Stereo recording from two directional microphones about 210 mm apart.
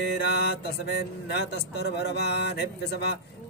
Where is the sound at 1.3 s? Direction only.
50° left (ahead or behind).